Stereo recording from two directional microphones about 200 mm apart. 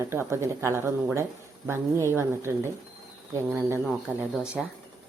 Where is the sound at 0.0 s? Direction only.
15° right (ahead or behind).